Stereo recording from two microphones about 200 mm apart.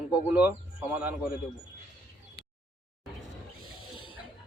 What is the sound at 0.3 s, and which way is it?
Speech, 5° right (ahead or behind).